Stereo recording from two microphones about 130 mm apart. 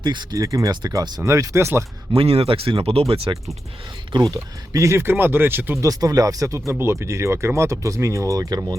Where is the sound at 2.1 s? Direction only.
45° right (ahead or behind).